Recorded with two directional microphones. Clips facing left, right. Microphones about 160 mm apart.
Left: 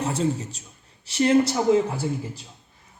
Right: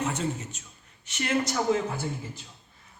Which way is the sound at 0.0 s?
35° left (ahead or behind).